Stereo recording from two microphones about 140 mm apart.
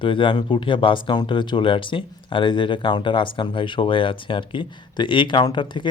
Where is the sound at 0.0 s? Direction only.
35° left (ahead or behind).